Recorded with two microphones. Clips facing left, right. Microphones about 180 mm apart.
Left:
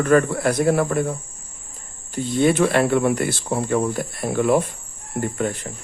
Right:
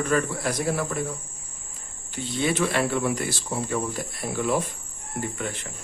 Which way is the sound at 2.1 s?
50° left (ahead or behind).